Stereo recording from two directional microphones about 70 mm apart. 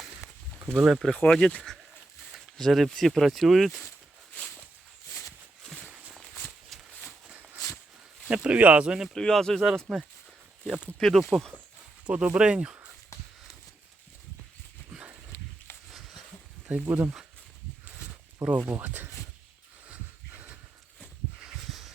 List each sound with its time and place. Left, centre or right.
0.7 s speech: centre
1.1 s speech: centre
6.7 s a sound: centre
7.3 s a sound: centre
8.3 s speech: centre
9.1 s speech: centre
11.0 s speech: centre
12.0 s speech: centre
14.9 s horse: centre
16.6 s speech: centre
18.4 s speech: centre
19.9 s a sound: right
21.7 s a sound: centre